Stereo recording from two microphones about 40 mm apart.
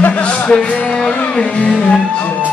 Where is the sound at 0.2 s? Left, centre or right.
Left.